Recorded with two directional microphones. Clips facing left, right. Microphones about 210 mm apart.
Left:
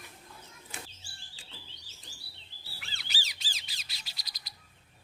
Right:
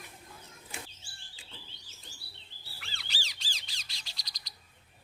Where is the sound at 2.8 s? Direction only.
Centre (ahead or behind).